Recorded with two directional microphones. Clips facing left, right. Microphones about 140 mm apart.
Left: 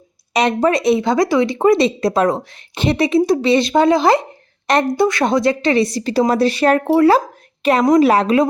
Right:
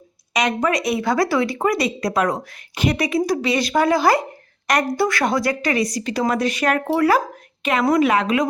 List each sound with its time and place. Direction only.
0.3 s a woman's voice: 30° left (ahead or behind)